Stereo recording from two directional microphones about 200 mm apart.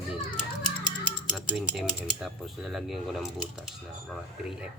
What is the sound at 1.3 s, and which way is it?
Speech, centre (ahead or behind).